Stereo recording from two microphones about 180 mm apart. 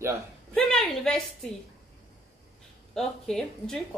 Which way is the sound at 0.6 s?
5° left (ahead or behind).